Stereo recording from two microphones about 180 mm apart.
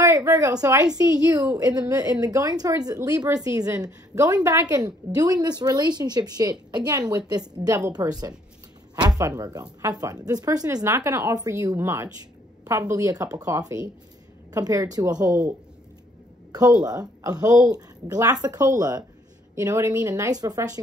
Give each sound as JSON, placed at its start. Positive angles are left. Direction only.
{"t": 0.0, "sound": "a woman's voice", "side_deg": -15}
{"t": 16.5, "sound": "a woman's voice", "side_deg": -20}